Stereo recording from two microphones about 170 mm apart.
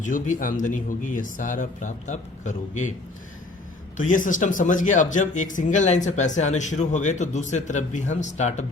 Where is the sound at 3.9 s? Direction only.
50° left (ahead or behind).